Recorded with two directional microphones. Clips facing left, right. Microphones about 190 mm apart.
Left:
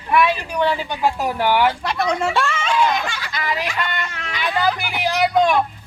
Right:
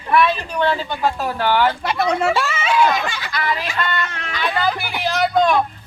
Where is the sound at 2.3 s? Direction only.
5° right (ahead or behind).